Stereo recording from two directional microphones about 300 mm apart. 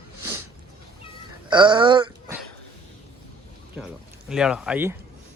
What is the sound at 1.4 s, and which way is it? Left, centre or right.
Speech, centre.